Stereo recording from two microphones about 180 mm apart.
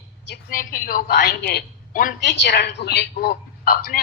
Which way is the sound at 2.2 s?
70° left (ahead or behind).